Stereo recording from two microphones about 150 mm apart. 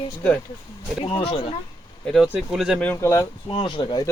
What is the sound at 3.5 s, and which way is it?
Speech, 35° left (ahead or behind).